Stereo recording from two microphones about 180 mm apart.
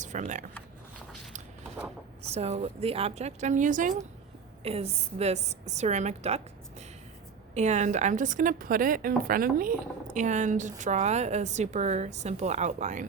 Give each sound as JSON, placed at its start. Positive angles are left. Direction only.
{"t": 0.0, "sound": "speech", "side_deg": -45}
{"t": 2.3, "sound": "a woman's voice", "side_deg": -35}
{"t": 4.6, "sound": "a woman's voice", "side_deg": -35}